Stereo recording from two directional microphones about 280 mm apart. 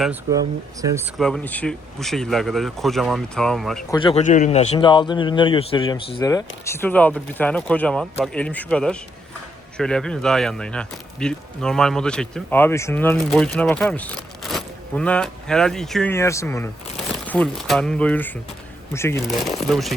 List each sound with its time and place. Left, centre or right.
0.0 s speech: centre
1.2 s speech: centre
3.9 s a man's voice: centre